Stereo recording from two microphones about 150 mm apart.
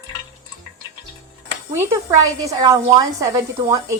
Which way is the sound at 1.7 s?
20° right (ahead or behind).